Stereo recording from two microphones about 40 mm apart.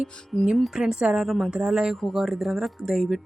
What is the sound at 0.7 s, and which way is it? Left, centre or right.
Speech, centre.